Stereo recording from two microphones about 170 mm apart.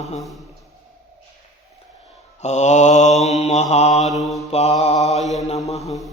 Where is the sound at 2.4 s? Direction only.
45° left (ahead or behind).